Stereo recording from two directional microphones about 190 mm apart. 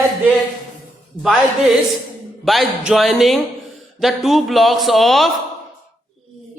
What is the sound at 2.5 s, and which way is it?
A woman's voice, centre (ahead or behind).